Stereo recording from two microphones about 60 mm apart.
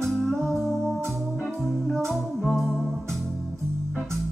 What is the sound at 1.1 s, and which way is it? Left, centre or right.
Organ, centre.